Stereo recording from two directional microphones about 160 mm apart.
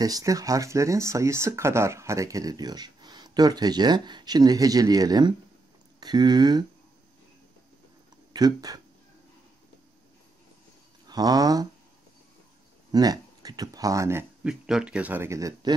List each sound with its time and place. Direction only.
0.0 s speech: 20° right (ahead or behind)
8.3 s speech: 25° right (ahead or behind)
11.1 s speech: 25° right (ahead or behind)
12.9 s speech: 25° right (ahead or behind)
14.4 s speech: 5° right (ahead or behind); by 15.7 s 20° right (ahead or behind)